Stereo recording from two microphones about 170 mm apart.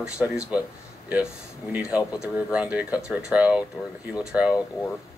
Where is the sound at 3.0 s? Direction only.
5° right (ahead or behind).